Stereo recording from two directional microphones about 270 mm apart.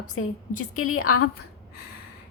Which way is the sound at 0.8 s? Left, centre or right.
Left.